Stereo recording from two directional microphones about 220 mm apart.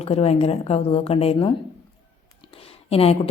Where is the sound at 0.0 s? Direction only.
25° left (ahead or behind).